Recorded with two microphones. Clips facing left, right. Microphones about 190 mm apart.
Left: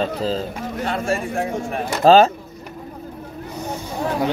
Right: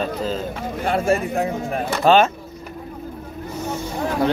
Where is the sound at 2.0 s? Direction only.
35° left (ahead or behind).